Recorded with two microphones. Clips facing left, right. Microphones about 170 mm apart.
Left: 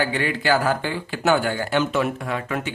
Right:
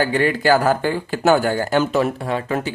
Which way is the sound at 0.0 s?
45° right (ahead or behind).